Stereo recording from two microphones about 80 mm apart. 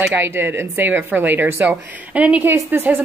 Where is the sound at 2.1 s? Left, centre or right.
Centre.